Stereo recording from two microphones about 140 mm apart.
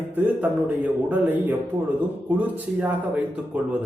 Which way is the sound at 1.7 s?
25° right (ahead or behind).